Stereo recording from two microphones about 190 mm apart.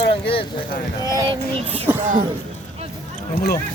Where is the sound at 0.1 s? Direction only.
30° left (ahead or behind).